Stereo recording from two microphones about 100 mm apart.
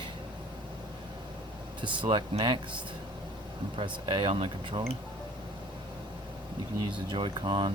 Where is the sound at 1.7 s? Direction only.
55° right (ahead or behind).